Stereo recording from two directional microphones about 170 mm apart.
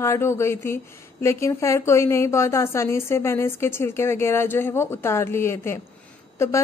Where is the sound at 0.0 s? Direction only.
15° left (ahead or behind).